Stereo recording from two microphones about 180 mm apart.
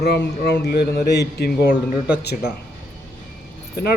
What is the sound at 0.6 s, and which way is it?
A man's voice, 60° left (ahead or behind).